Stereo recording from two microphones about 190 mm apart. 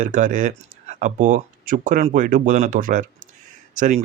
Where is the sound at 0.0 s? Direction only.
45° right (ahead or behind).